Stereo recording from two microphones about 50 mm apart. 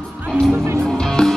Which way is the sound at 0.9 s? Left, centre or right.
Centre.